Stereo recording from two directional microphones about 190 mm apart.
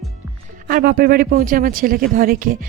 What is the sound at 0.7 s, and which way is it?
A man's voice, 50° right (ahead or behind).